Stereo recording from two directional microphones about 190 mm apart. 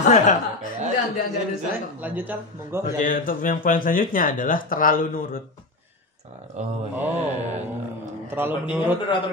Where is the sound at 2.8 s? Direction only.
45° left (ahead or behind).